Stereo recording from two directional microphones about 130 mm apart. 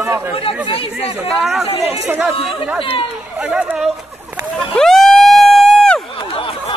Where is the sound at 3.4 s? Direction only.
10° right (ahead or behind).